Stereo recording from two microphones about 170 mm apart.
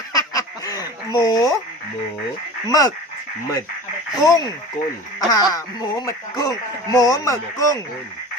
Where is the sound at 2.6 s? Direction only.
20° left (ahead or behind).